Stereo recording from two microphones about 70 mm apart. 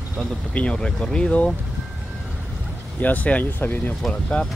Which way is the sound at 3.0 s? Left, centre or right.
Left.